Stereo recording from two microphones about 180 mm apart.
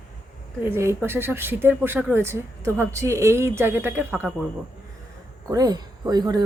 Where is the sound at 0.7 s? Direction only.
15° right (ahead or behind).